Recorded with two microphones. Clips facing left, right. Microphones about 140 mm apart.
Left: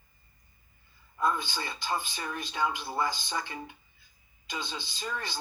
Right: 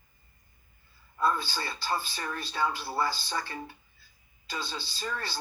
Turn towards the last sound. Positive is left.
turn(degrees=15)  # may be behind; listen again after turning